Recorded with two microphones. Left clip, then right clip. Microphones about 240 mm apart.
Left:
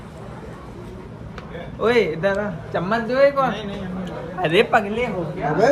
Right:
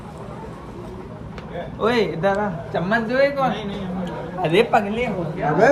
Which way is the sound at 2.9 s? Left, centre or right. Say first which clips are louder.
Left 2 dB; centre.